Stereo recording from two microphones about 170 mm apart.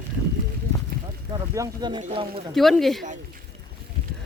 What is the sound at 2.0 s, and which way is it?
Speech, 40° right (ahead or behind).